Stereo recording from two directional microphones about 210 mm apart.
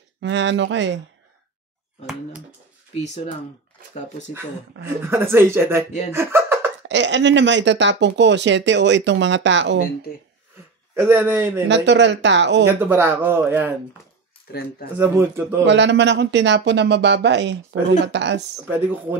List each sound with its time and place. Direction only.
0.2 s speech: 60° right (ahead or behind)
2.9 s speech: 35° left (ahead or behind)
4.8 s speech: 10° right (ahead or behind)
6.9 s speech: 60° right (ahead or behind)
11.0 s speech: 10° right (ahead or behind)
11.6 s speech: 55° right (ahead or behind)
12.8 s speech: 10° right (ahead or behind)
15.0 s speech: 10° right (ahead or behind)
15.6 s speech: 55° right (ahead or behind)